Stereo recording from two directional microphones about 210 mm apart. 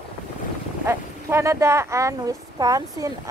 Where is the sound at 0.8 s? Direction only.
15° right (ahead or behind).